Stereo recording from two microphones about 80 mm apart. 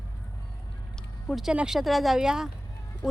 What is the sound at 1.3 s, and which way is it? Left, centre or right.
A woman's voice, centre.